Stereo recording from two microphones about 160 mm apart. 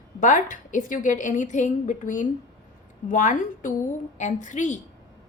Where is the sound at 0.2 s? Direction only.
50° left (ahead or behind).